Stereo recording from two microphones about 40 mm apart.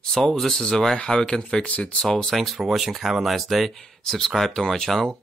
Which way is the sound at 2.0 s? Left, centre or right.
Centre.